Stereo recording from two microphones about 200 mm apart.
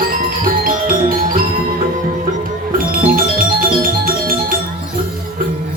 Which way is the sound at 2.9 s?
45° right (ahead or behind).